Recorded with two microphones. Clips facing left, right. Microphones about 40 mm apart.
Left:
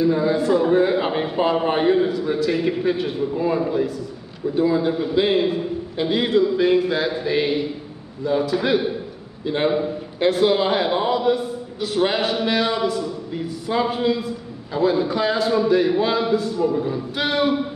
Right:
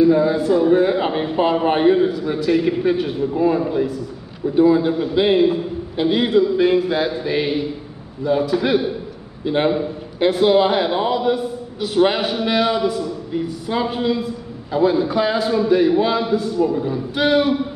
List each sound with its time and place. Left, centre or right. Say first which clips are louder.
0.0 s a man's voice: right 4 dB; centre
9.4 s a man's voice: right 3 dB; centre
9.7 s a man's voice: right 1 dB; centre